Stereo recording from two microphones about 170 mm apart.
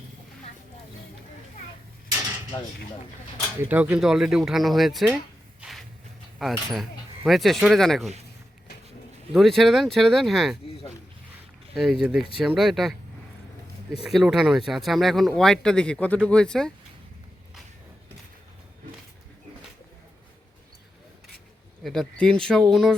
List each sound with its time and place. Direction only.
2.5 s speech: 15° left (ahead or behind)
3.6 s speech: 10° right (ahead or behind)
5.5 s a sound: centre (ahead or behind)
6.4 s speech: centre (ahead or behind)
9.3 s speech: centre (ahead or behind)
11.7 s speech: centre (ahead or behind)
14.0 s speech: centre (ahead or behind)
21.8 s speech: 5° left (ahead or behind)